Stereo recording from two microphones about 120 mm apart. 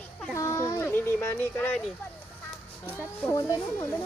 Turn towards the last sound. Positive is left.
turn(degrees=25)  # may be behind; listen again after turning